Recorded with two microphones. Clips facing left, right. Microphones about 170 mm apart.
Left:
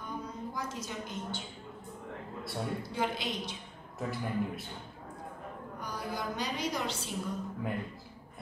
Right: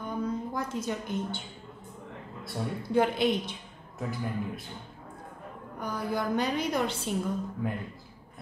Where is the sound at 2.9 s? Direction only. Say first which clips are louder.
Right 12 dB; 55° right (ahead or behind).